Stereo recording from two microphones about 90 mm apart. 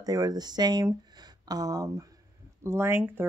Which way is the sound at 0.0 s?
45° right (ahead or behind).